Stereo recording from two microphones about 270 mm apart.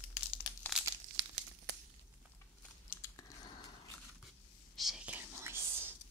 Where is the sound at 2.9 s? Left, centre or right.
Centre.